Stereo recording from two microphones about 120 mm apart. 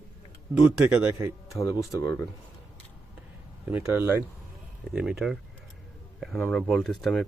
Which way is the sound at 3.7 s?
20° right (ahead or behind).